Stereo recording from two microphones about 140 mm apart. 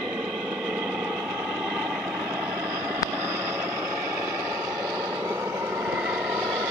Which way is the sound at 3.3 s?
15° right (ahead or behind).